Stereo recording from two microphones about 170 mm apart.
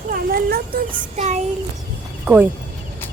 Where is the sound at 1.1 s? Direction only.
40° right (ahead or behind).